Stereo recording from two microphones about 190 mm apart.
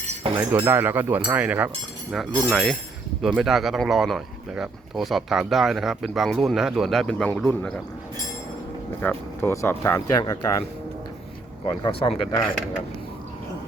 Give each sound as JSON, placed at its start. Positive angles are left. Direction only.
{"t": 0.3, "sound": "speech", "side_deg": -10}
{"t": 9.0, "sound": "speech", "side_deg": 10}
{"t": 11.6, "sound": "speech", "side_deg": 25}